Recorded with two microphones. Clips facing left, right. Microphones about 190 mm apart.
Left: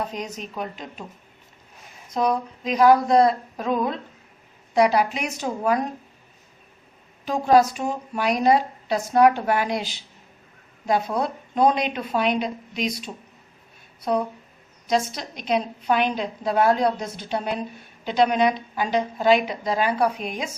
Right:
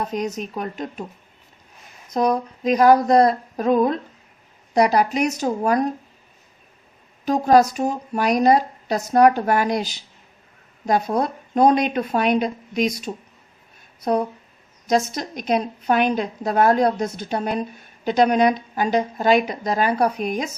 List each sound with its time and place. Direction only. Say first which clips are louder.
0.3 s a woman's voice: right 4 dB; 45° right (ahead or behind)
2.1 s a woman's voice: right 3 dB; 45° right (ahead or behind)
7.3 s a woman's voice: right 2 dB; 40° right (ahead or behind)
14.8 s a woman's voice: right 3 dB; 45° right (ahead or behind)